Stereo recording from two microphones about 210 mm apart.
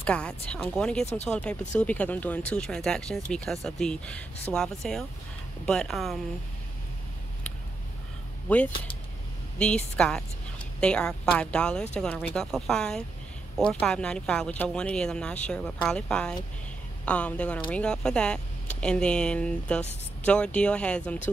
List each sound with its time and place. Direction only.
0.0 s speech: 5° left (ahead or behind)
8.5 s a woman's voice: 5° left (ahead or behind)